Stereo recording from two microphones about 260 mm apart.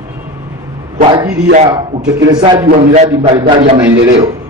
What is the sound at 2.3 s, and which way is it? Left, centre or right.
Speech, centre.